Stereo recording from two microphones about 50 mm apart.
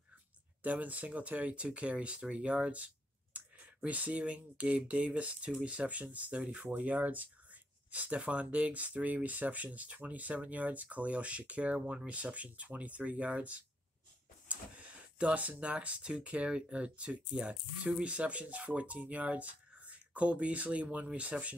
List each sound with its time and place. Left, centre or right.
0.6 s speech: right
6.6 s speech: right